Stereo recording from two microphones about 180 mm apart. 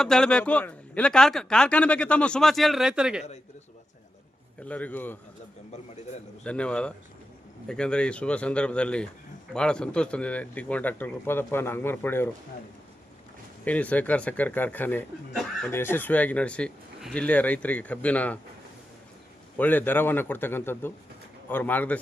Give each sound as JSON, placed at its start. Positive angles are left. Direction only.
{"t": 0.0, "sound": "speech", "side_deg": 5}
{"t": 4.6, "sound": "speech", "side_deg": 10}
{"t": 6.4, "sound": "speech", "side_deg": 5}
{"t": 13.7, "sound": "speech", "side_deg": 10}
{"t": 19.5, "sound": "speech", "side_deg": 10}